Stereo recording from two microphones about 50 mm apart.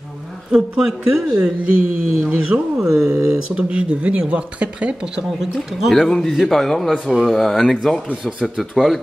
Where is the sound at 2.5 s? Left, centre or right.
Right.